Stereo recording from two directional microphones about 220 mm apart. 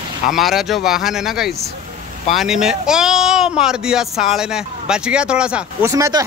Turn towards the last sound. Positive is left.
turn(degrees=-15)  # may be behind; listen again after turning